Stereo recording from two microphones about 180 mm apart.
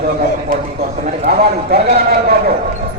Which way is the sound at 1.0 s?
45° right (ahead or behind).